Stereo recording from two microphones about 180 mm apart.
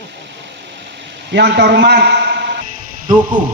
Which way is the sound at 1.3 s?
70° right (ahead or behind).